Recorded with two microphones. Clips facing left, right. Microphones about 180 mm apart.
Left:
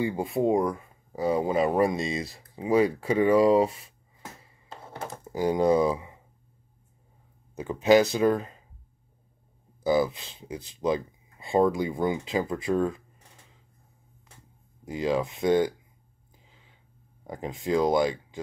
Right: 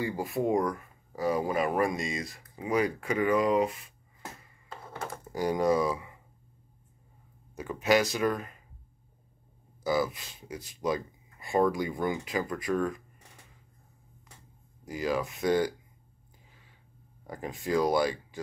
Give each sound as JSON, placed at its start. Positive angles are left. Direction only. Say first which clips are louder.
{"t": 0.0, "sound": "speech", "louder": "left 4 dB", "side_deg": 25}
{"t": 4.4, "sound": "a sound", "louder": "left 1 dB", "side_deg": 25}
{"t": 5.3, "sound": "speech", "louder": "left 4 dB", "side_deg": 20}
{"t": 7.6, "sound": "speech", "louder": "left 6 dB", "side_deg": 25}
{"t": 9.8, "sound": "speech", "louder": "left 5 dB", "side_deg": 20}
{"t": 14.9, "sound": "speech", "louder": "left 4 dB", "side_deg": 25}
{"t": 16.4, "sound": "a sound", "louder": "left 1 dB", "side_deg": 20}
{"t": 17.3, "sound": "speech", "louder": "left 3 dB", "side_deg": 20}